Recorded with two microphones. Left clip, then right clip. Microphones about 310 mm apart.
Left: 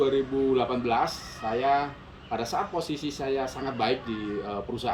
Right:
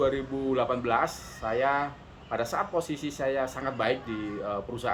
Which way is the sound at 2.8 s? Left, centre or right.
Centre.